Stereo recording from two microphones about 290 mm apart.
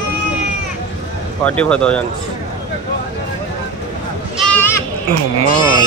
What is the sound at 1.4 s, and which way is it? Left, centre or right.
Speech, centre.